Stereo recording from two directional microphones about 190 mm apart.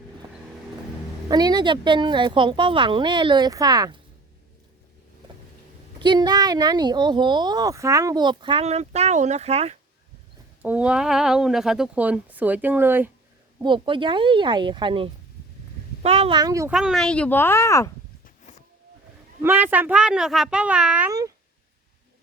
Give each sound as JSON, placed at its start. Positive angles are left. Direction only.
{"t": 1.3, "sound": "speech", "side_deg": -20}
{"t": 6.0, "sound": "speech", "side_deg": -25}
{"t": 10.6, "sound": "speech", "side_deg": -5}
{"t": 13.6, "sound": "speech", "side_deg": -25}
{"t": 16.4, "sound": "speech", "side_deg": -15}
{"t": 16.7, "sound": "speech", "side_deg": 0}
{"t": 19.4, "sound": "a woman's voice", "side_deg": -10}